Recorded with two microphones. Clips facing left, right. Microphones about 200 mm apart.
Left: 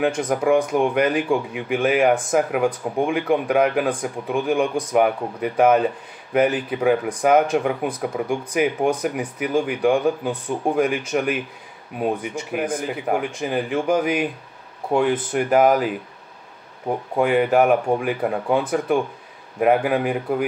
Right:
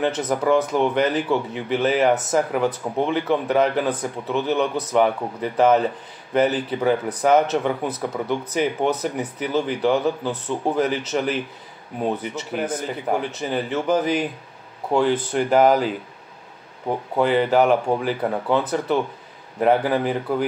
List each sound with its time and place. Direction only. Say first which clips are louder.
0.0 s a man's voice: left 1 dB; 10° left (ahead or behind)
17.2 s a man's voice: left 1 dB; 10° left (ahead or behind)